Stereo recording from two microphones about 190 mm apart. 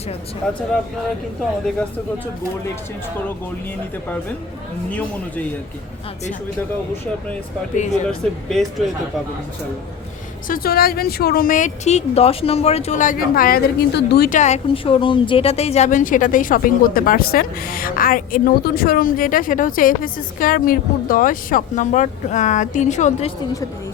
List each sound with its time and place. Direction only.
0.4 s speech: 5° left (ahead or behind)
8.0 s speech: centre (ahead or behind)
10.5 s speech: 50° left (ahead or behind)